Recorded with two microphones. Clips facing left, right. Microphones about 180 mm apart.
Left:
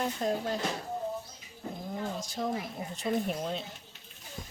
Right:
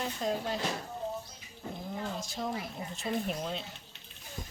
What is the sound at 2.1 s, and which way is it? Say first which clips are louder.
Speech: left 3 dB; 50° left (ahead or behind).